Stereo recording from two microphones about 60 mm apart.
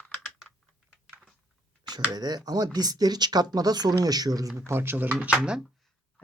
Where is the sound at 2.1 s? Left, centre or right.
Right.